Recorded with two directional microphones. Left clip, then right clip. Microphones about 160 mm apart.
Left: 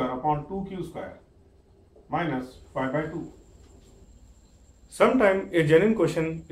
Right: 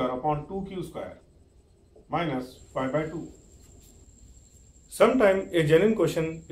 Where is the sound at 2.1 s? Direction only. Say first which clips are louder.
Left 1 dB; 10° left (ahead or behind).